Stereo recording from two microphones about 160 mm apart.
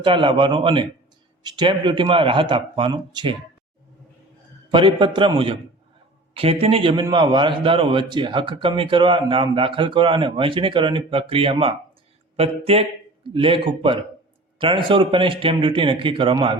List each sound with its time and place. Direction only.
0.0 s a man's voice: 30° right (ahead or behind)
4.7 s a man's voice: 30° right (ahead or behind)